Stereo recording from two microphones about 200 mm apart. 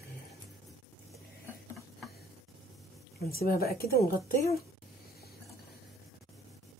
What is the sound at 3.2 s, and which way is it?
Speech, 50° left (ahead or behind).